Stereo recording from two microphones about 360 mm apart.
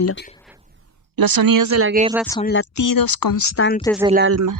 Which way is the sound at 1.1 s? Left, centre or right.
Right.